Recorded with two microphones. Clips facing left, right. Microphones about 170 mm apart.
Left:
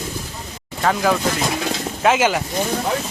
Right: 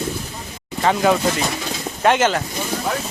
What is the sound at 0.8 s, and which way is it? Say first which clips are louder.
Speech: right 2 dB; centre (ahead or behind).